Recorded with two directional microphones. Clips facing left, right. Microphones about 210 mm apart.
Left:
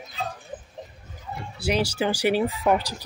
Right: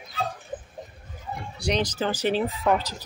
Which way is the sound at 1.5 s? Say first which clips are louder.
Left 2 dB; 5° left (ahead or behind).